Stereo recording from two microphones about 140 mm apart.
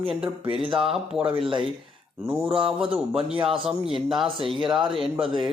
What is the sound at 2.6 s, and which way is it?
Speech, 5° right (ahead or behind).